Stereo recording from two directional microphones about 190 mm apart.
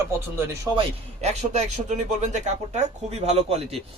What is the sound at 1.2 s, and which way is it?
Speech, 35° right (ahead or behind).